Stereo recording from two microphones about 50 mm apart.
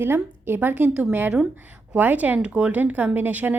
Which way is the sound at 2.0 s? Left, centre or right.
Right.